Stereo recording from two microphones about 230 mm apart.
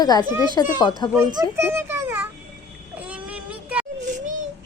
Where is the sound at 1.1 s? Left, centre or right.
Centre.